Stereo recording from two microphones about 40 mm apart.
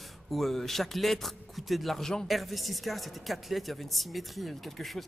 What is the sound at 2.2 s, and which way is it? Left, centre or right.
Speech, centre.